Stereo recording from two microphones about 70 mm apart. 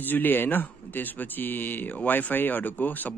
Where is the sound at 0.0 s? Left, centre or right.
Left.